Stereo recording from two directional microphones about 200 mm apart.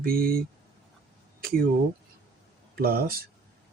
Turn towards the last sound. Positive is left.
turn(degrees=-50)  # may be behind; listen again after turning